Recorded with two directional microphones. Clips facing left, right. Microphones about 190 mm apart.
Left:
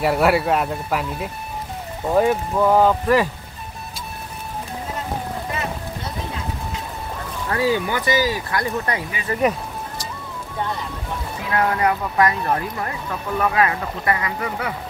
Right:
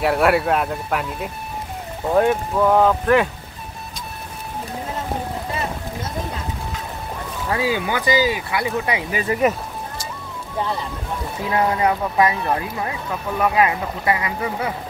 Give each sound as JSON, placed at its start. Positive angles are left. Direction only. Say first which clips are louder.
{"t": 0.0, "sound": "speech", "louder": "even", "side_deg": 0}
{"t": 7.4, "sound": "speech", "louder": "left 1 dB", "side_deg": -15}
{"t": 11.5, "sound": "speech", "louder": "right 1 dB", "side_deg": -20}